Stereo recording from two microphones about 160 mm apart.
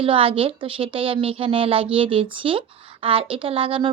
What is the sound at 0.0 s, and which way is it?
A woman's voice, 35° right (ahead or behind).